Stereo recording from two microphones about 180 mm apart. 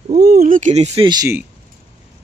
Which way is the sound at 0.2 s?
55° right (ahead or behind).